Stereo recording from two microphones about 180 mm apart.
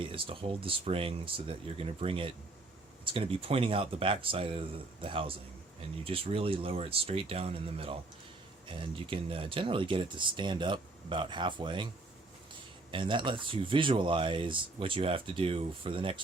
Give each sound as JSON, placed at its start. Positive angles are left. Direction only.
{"t": 0.0, "sound": "speech", "side_deg": -30}
{"t": 12.9, "sound": "speech", "side_deg": -30}